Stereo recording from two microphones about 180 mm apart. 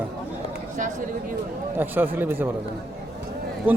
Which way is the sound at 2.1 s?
10° right (ahead or behind).